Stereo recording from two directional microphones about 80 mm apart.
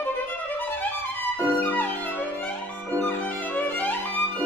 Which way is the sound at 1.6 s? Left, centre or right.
Left.